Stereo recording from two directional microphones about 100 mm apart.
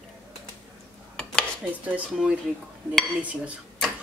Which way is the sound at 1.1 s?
10° left (ahead or behind).